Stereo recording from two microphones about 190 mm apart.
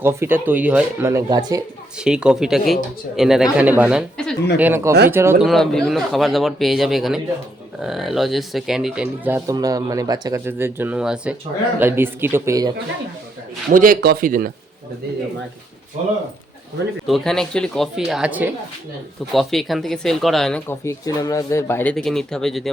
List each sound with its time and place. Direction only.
0.0 s speech: 15° right (ahead or behind)
2.0 s speech: 5° right (ahead or behind)
5.5 s speech: centre (ahead or behind); by 12.7 s 15° right (ahead or behind)
13.7 s speech: 45° right (ahead or behind)
16.0 s speech: 40° right (ahead or behind)
17.1 s speech: centre (ahead or behind)
20.8 s speech: 15° left (ahead or behind); by 22.7 s centre (ahead or behind)